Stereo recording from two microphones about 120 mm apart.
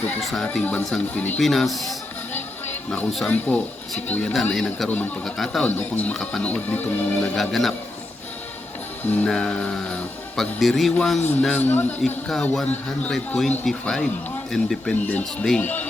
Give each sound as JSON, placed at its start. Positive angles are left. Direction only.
{"t": 0.2, "sound": "speech", "side_deg": 0}
{"t": 0.4, "sound": "speech", "side_deg": 10}
{"t": 1.4, "sound": "speech", "side_deg": 0}
{"t": 4.9, "sound": "speech", "side_deg": 15}
{"t": 5.2, "sound": "speech", "side_deg": 5}
{"t": 7.3, "sound": "speech", "side_deg": 0}
{"t": 9.0, "sound": "speech", "side_deg": 15}
{"t": 11.5, "sound": "speech", "side_deg": 15}
{"t": 12.3, "sound": "speech", "side_deg": 5}